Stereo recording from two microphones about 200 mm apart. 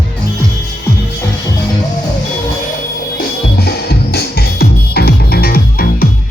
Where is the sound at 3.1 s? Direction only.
50° left (ahead or behind).